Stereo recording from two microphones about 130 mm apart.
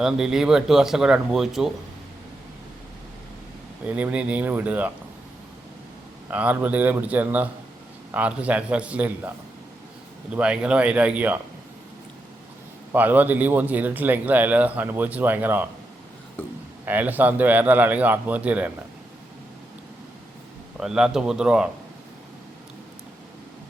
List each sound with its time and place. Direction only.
0.0 s speech: 5° right (ahead or behind)
3.8 s speech: 10° right (ahead or behind)
6.3 s speech: 10° right (ahead or behind)
10.3 s speech: 5° right (ahead or behind)
12.9 s speech: 15° right (ahead or behind)
16.4 s speech: 15° left (ahead or behind)
16.8 s speech: 15° right (ahead or behind)
20.7 s speech: 5° right (ahead or behind)